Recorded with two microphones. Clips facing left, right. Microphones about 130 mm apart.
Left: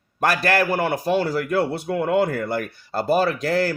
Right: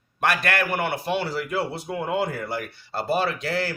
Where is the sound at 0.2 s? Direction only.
35° left (ahead or behind).